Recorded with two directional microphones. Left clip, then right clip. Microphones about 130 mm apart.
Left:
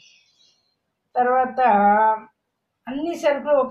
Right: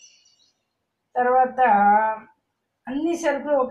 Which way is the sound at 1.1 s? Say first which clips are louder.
Even; 20° left (ahead or behind).